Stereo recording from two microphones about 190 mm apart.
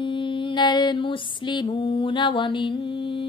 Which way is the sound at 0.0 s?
25° left (ahead or behind).